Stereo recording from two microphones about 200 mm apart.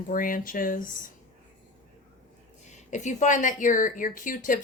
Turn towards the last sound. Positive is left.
turn(degrees=40)  # may be behind; listen again after turning